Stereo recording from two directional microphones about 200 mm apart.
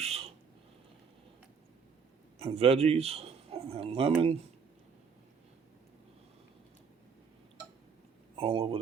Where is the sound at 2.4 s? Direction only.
30° right (ahead or behind).